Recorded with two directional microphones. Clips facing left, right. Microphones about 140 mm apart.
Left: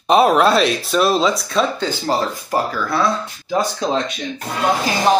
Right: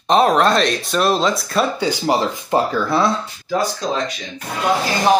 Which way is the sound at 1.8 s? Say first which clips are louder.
Right 2 dB; 15° right (ahead or behind).